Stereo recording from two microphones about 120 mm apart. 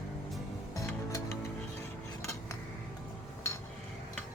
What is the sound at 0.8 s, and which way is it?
Music, 25° left (ahead or behind).